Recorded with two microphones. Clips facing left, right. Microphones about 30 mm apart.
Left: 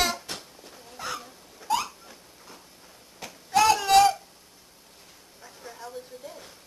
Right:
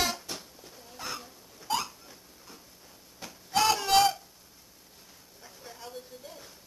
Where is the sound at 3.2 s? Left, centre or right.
Centre.